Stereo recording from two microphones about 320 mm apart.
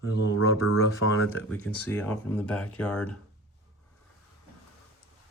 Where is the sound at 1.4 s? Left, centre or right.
Centre.